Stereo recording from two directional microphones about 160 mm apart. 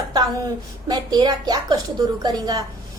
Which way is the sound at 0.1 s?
25° right (ahead or behind).